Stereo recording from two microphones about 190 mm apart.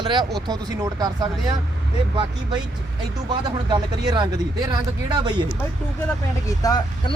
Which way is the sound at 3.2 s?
20° right (ahead or behind).